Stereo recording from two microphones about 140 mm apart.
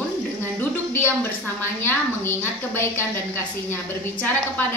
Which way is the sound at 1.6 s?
15° left (ahead or behind).